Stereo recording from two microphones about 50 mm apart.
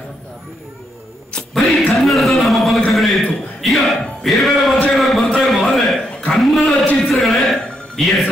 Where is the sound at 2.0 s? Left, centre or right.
Centre.